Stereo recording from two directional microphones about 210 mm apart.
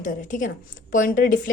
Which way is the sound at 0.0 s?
40° left (ahead or behind).